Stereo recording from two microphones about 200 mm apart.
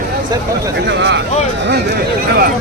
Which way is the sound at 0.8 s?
60° right (ahead or behind).